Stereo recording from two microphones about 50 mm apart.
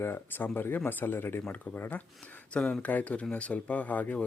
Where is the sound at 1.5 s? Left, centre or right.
Left.